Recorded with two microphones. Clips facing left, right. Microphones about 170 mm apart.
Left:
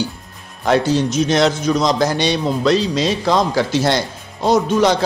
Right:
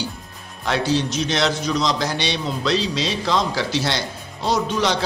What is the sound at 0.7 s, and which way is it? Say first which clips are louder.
A man's voice: left 5 dB; 45° left (ahead or behind).